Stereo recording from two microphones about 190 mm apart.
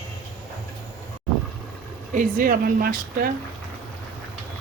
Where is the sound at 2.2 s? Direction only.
50° right (ahead or behind).